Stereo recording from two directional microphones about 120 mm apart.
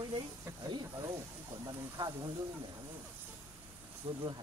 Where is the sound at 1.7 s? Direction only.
35° right (ahead or behind).